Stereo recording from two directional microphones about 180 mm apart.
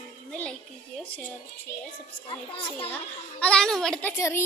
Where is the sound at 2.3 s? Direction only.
30° left (ahead or behind).